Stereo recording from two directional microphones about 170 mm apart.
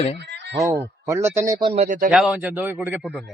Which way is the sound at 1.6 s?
40° right (ahead or behind).